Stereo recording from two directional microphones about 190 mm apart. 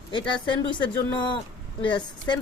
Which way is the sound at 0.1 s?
25° left (ahead or behind).